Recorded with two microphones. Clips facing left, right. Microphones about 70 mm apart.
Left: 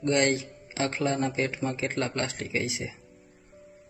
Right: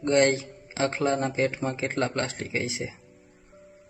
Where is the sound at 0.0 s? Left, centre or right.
Right.